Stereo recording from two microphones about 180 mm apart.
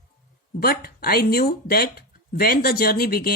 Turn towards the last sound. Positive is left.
turn(degrees=60)  # may be behind; listen again after turning